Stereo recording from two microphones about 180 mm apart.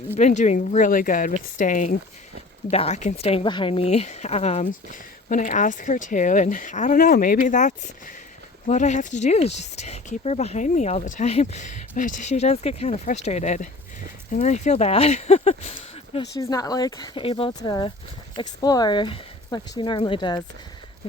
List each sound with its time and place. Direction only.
0.2 s speech: 40° left (ahead or behind)
2.6 s speech: 35° left (ahead or behind)
16.4 s speech: 20° left (ahead or behind)